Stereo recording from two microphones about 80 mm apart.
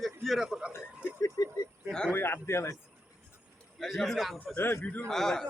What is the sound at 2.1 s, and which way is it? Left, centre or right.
Speech, left.